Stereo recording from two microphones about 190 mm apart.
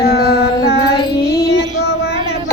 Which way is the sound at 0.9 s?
20° left (ahead or behind).